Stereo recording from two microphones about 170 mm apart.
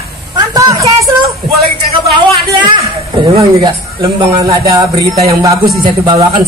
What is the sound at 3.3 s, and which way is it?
A woman's voice, 20° right (ahead or behind).